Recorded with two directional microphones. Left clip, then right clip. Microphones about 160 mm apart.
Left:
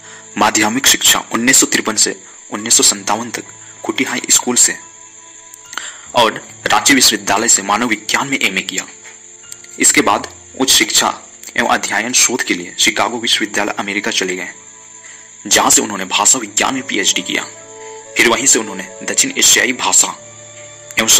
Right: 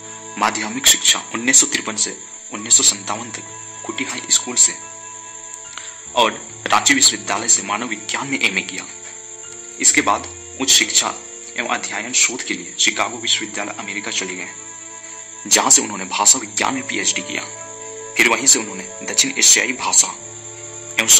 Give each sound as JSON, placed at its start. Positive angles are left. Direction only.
{"t": 0.4, "sound": "speech", "side_deg": 40}
{"t": 5.8, "sound": "speech", "side_deg": 40}
{"t": 9.8, "sound": "speech", "side_deg": 40}